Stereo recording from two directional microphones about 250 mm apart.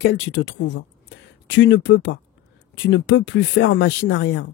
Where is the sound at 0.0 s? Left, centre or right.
Left.